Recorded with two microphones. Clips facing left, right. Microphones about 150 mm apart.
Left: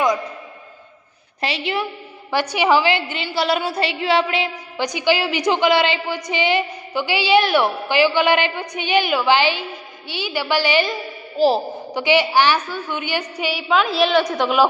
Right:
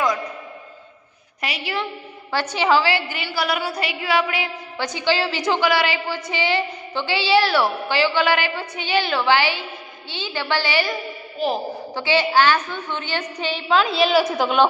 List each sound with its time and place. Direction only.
1.4 s a woman's voice: 25° left (ahead or behind)
11.3 s a woman's voice: 35° left (ahead or behind)
11.9 s a woman's voice: 15° left (ahead or behind)